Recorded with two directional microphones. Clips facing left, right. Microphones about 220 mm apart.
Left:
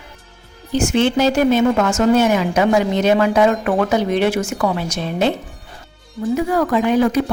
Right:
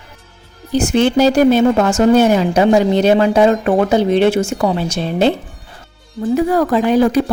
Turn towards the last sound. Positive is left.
turn(degrees=-35)  # may be behind; listen again after turning